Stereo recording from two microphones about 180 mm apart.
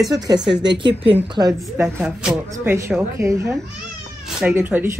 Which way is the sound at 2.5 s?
15° right (ahead or behind).